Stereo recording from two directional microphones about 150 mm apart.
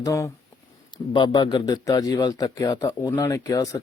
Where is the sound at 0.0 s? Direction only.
20° left (ahead or behind).